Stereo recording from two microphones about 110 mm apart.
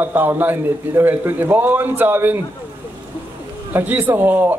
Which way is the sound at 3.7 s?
20° right (ahead or behind).